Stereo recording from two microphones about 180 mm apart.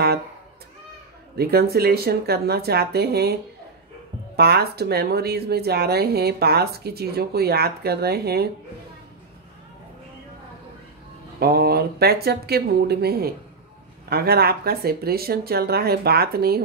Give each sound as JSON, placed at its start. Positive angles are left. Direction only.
{"t": 1.3, "sound": "speech", "side_deg": -60}
{"t": 4.4, "sound": "speech", "side_deg": -60}
{"t": 11.3, "sound": "speech", "side_deg": -60}